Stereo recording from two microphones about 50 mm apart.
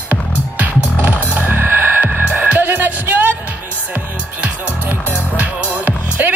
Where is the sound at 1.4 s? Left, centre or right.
Right.